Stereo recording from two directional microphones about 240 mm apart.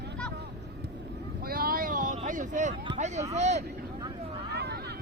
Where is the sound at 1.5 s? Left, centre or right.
Right.